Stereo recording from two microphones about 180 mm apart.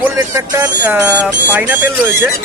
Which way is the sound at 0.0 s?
15° right (ahead or behind).